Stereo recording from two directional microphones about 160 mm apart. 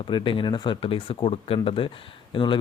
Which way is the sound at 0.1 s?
30° left (ahead or behind).